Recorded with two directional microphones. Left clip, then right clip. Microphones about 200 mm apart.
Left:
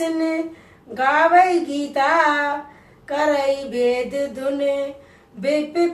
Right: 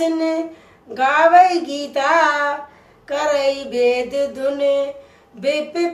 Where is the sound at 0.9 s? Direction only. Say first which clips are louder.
Right 3 dB; 35° right (ahead or behind).